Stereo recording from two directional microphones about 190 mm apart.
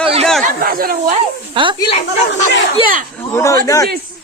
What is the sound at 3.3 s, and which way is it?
Speech, 15° left (ahead or behind).